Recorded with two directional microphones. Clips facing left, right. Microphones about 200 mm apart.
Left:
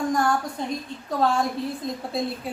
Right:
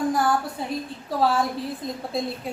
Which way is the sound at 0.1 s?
5° right (ahead or behind).